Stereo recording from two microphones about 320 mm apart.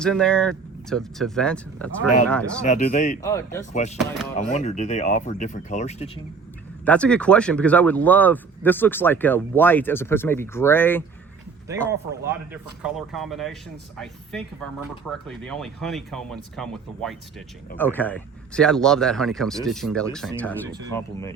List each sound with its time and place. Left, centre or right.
0.0 s speech: centre
2.6 s speech: left
3.2 s speech: centre
3.7 s speech: left
6.8 s speech: centre
11.9 s speech: centre